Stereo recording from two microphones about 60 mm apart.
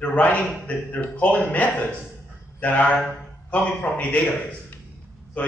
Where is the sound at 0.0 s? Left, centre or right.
Left.